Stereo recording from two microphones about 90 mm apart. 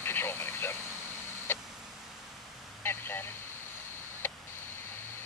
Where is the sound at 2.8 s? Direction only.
25° left (ahead or behind).